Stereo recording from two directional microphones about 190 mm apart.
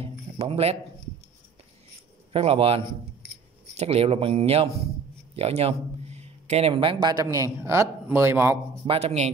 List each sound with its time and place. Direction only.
0.0 s a sound: 30° right (ahead or behind)
2.3 s a man's voice: 30° right (ahead or behind); by 8.5 s 10° right (ahead or behind)
8.8 s a man's voice: 30° right (ahead or behind)